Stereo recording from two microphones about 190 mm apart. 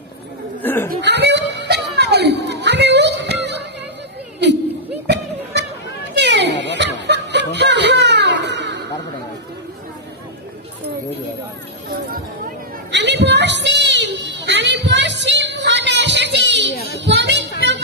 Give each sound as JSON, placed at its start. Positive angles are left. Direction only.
{"t": 0.6, "sound": "laughter", "side_deg": 10}
{"t": 0.8, "sound": "a sound", "side_deg": -65}
{"t": 5.0, "sound": "music", "side_deg": -65}
{"t": 6.1, "sound": "a sound", "side_deg": -65}
{"t": 12.9, "sound": "children playing", "side_deg": -65}
{"t": 17.0, "sound": "music", "side_deg": -65}